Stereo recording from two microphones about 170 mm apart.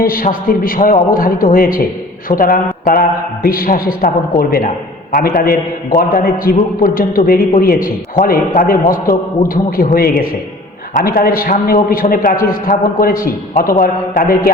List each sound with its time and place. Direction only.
0.0 s a man's voice: 55° left (ahead or behind)